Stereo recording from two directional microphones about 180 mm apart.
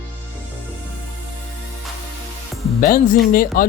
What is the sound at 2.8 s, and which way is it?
Speech, 50° left (ahead or behind).